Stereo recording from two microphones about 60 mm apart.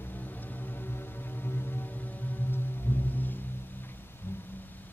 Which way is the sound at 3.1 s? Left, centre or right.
Left.